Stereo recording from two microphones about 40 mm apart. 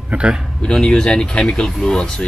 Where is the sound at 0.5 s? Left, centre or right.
Centre.